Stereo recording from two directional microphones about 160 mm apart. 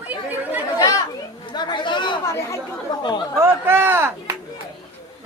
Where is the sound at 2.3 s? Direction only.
15° left (ahead or behind).